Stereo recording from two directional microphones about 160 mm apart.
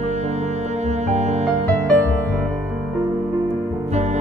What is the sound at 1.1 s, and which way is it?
Music, 45° right (ahead or behind).